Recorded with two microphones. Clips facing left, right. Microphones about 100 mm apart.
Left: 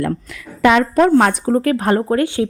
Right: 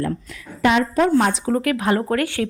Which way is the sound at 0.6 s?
75° left (ahead or behind).